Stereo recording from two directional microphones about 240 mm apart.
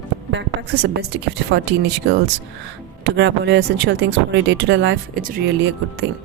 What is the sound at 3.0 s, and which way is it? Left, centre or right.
Speech, right.